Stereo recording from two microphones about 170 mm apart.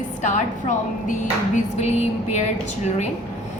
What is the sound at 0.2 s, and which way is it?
A woman's voice, 45° left (ahead or behind).